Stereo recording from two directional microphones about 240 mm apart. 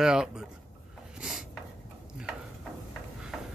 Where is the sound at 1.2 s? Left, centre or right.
Centre.